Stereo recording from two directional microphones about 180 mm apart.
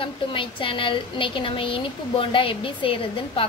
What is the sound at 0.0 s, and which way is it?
A woman's voice, 30° left (ahead or behind).